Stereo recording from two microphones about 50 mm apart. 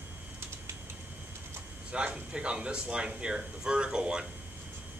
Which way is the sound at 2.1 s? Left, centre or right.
Right.